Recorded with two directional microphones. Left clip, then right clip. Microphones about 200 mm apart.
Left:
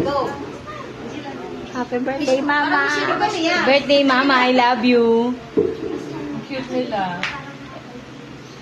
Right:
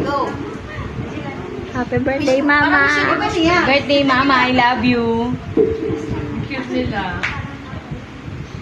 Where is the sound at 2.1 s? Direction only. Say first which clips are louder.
Right 4 dB; 15° right (ahead or behind).